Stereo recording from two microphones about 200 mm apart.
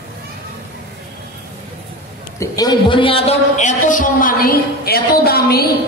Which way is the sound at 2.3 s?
20° left (ahead or behind).